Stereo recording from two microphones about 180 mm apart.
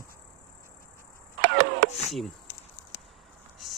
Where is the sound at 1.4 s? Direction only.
65° right (ahead or behind).